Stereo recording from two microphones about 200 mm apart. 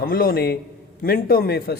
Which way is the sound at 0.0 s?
45° left (ahead or behind).